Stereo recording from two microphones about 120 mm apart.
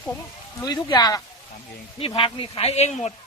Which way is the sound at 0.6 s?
35° left (ahead or behind).